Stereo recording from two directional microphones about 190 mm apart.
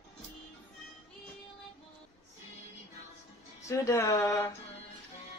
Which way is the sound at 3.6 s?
15° left (ahead or behind).